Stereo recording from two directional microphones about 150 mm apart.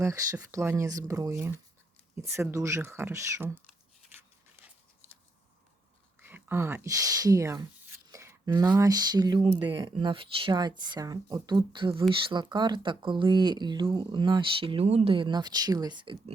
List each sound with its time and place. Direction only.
0.0 s speech: 20° right (ahead or behind)
4.2 s a sound: 10° right (ahead or behind)
6.2 s speech: 15° right (ahead or behind)
8.1 s a sound: 15° right (ahead or behind)
8.5 s speech: 25° right (ahead or behind)
9.4 s speech: 40° right (ahead or behind)